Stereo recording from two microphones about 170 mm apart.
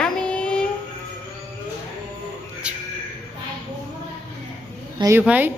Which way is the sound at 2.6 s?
5° right (ahead or behind).